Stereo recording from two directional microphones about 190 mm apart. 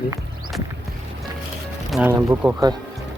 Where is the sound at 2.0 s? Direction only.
10° right (ahead or behind).